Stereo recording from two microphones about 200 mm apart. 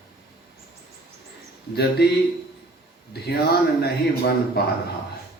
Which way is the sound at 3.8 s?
55° left (ahead or behind).